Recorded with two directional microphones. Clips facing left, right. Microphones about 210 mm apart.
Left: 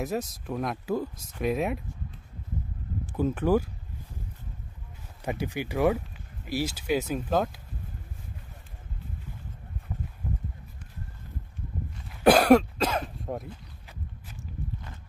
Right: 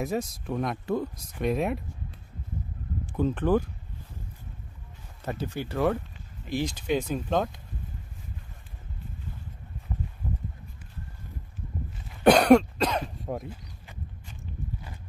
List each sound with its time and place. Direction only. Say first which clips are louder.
0.0 s speech: right 1 dB; centre (ahead or behind)
3.1 s speech: even; 5° left (ahead or behind)
5.2 s speech: left 1 dB; 15° left (ahead or behind)
12.1 s cough: right 1 dB; 5° left (ahead or behind)
13.3 s a sound: right 1 dB; centre (ahead or behind)